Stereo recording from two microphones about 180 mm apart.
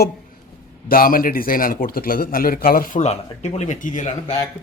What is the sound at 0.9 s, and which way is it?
A man's voice, 50° left (ahead or behind).